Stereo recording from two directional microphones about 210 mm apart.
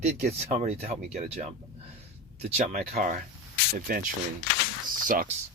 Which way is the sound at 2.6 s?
40° right (ahead or behind).